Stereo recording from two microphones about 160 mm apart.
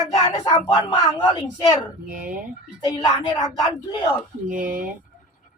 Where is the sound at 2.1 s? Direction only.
60° right (ahead or behind).